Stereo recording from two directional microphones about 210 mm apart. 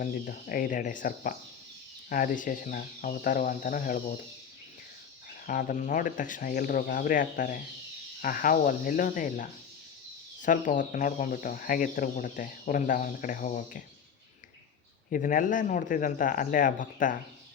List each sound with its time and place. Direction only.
0.0 s speech: 40° left (ahead or behind)
5.5 s speech: 40° left (ahead or behind)
15.1 s speech: 40° left (ahead or behind)